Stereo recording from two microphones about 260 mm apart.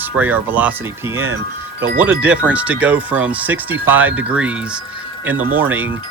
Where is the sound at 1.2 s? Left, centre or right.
Right.